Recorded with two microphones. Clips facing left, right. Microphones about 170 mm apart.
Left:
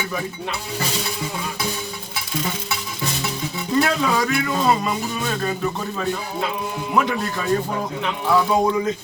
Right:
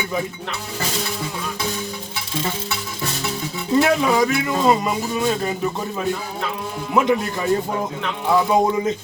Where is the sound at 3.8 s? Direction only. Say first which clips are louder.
Right 3 dB; 20° right (ahead or behind).